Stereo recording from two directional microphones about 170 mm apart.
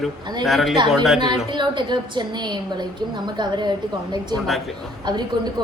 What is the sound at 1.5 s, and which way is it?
A woman's voice, 25° right (ahead or behind).